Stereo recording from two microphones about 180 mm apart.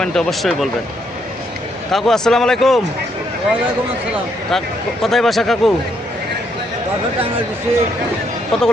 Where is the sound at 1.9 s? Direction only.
Centre (ahead or behind).